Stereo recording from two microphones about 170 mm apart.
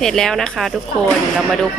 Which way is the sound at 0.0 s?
5° left (ahead or behind).